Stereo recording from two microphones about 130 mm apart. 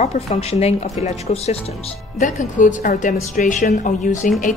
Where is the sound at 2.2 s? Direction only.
75° left (ahead or behind).